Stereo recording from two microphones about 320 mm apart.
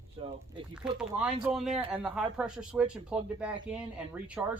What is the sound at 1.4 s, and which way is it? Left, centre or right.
Speech, centre.